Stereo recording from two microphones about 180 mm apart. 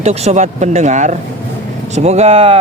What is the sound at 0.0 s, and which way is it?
Speech, 35° right (ahead or behind).